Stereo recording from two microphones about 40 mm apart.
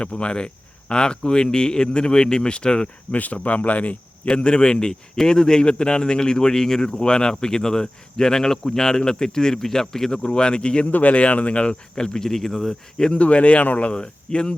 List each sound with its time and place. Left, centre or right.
0.0 s speech: left
3.1 s speech: left
4.4 s speech: left; by 10.2 s centre
10.2 s speech: left
10.9 s speech: left; by 12.7 s centre
13.1 s speech: left
13.9 s speech: left